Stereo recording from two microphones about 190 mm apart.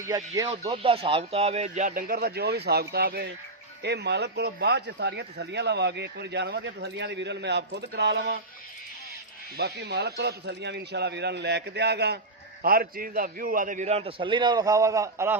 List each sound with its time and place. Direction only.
0.0 s speech: 15° right (ahead or behind)
0.7 s speech: 30° right (ahead or behind); by 8.4 s 65° right (ahead or behind)
9.6 s a man's voice: 60° right (ahead or behind); by 15.4 s 15° right (ahead or behind)